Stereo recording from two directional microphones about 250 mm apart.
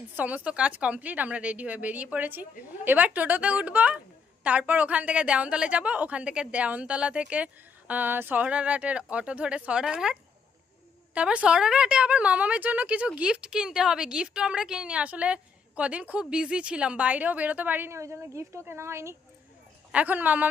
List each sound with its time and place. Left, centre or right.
0.2 s a woman's voice: centre